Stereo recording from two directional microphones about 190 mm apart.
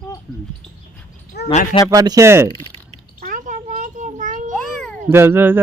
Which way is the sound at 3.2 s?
40° right (ahead or behind).